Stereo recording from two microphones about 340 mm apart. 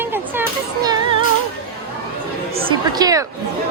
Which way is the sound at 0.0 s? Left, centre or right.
Centre.